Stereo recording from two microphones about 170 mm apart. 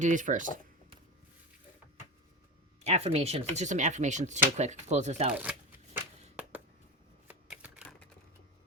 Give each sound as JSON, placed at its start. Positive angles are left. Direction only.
{"t": 0.0, "sound": "speech", "side_deg": -50}
{"t": 2.8, "sound": "speech", "side_deg": -40}
{"t": 5.4, "sound": "shuffling cards", "side_deg": -10}